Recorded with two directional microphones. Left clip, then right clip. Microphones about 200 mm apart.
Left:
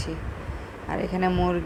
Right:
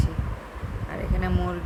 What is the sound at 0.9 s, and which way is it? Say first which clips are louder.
Speech: left 6 dB; 15° left (ahead or behind).